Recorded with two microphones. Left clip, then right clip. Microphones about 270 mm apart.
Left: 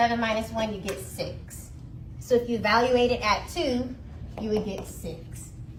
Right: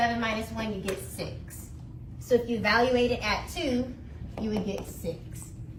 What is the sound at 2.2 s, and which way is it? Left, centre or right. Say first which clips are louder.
A woman's voice: left 1 dB; centre.